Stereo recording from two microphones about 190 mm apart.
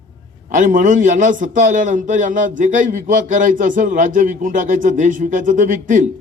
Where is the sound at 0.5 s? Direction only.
40° right (ahead or behind).